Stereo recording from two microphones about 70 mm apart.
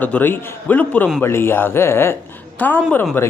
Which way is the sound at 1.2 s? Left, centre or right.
Left.